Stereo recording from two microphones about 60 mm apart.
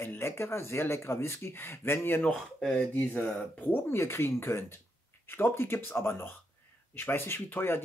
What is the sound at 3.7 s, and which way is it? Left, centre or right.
Speech, left.